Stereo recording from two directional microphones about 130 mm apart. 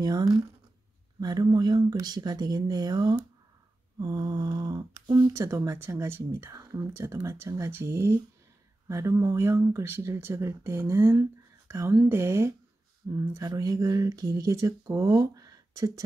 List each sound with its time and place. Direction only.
0.0 s speech: 30° right (ahead or behind)